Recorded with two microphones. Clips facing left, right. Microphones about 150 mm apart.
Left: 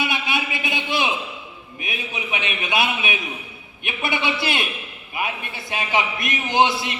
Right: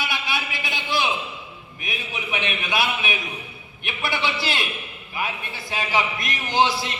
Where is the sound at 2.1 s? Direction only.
20° left (ahead or behind).